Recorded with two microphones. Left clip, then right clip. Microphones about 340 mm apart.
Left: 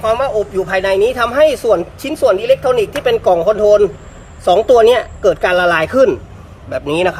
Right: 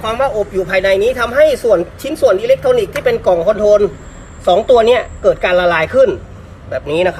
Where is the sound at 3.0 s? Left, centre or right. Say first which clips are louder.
Even; left.